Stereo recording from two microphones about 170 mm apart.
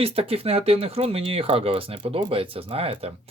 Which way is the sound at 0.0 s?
35° right (ahead or behind).